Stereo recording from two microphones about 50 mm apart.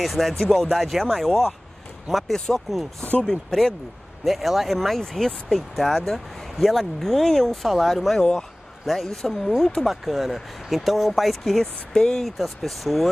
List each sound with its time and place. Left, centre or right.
0.0 s speech: centre
2.3 s speech: centre
8.2 s speech: centre
8.8 s speech: centre
9.8 s speech: centre
12.3 s speech: centre